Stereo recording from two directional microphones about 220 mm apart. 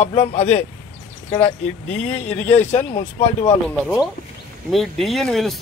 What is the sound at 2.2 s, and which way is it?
Speech, 10° left (ahead or behind).